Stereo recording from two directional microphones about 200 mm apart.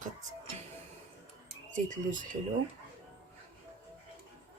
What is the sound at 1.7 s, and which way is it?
Speech, 40° right (ahead or behind).